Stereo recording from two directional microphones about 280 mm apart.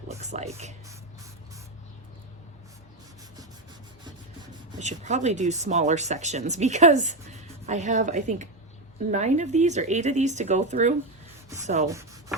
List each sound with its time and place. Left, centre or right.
0.1 s speech: right
4.8 s speech: right